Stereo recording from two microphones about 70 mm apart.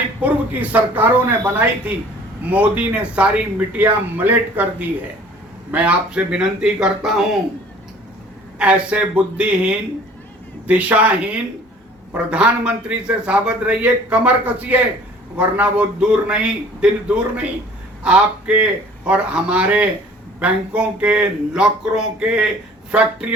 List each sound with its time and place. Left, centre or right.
0.2 s speech: right; by 7.3 s centre
8.5 s speech: centre